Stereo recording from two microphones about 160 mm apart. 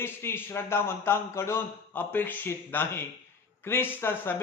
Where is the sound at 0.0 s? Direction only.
15° left (ahead or behind).